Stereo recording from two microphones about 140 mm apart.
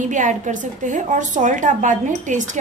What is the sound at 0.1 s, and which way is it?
A woman's voice, 65° right (ahead or behind).